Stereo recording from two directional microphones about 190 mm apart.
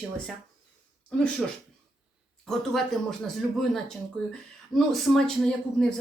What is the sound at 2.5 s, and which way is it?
A woman's voice, centre (ahead or behind).